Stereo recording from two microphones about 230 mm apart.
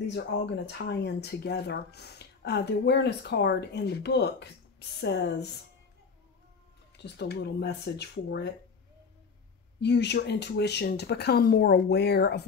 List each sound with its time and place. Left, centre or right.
0.0 s speech: left
7.0 s speech: left
9.8 s speech: left